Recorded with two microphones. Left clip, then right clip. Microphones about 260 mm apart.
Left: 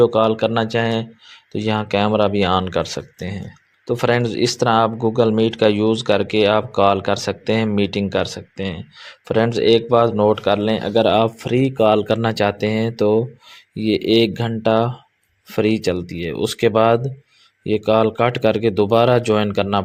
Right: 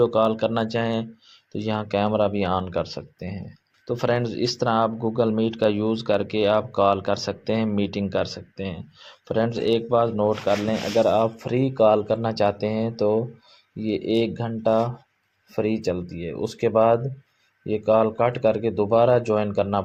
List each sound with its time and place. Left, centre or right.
0.0 s speech: left